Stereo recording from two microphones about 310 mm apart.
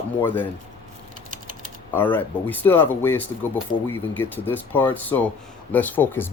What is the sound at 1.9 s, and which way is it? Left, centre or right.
Speech, centre.